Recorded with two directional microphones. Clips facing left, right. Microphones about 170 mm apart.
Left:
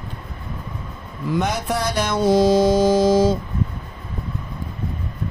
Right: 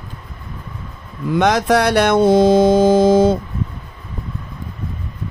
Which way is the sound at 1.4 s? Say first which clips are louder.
Right 10 dB; 90° right.